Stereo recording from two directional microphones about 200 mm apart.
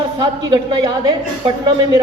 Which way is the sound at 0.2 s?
20° right (ahead or behind).